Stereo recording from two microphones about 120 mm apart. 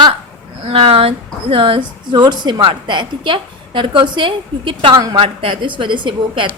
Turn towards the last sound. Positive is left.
turn(degrees=-45)  # may be behind; listen again after turning